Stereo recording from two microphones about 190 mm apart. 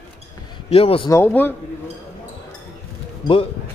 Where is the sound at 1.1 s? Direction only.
10° left (ahead or behind).